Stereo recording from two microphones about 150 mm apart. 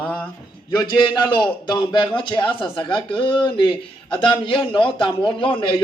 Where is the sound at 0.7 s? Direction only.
30° left (ahead or behind).